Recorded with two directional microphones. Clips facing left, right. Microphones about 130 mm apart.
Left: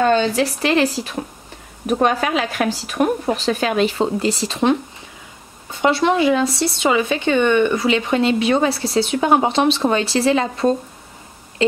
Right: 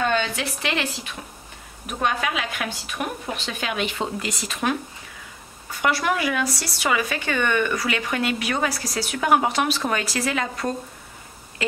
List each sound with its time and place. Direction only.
0.0 s a woman's voice: 35° left (ahead or behind)